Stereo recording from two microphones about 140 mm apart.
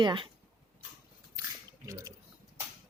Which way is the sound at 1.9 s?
20° right (ahead or behind).